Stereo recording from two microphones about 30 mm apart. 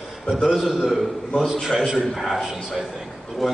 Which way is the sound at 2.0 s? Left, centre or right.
Centre.